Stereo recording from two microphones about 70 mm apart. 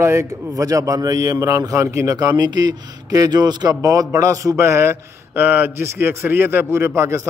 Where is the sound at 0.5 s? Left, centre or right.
Right.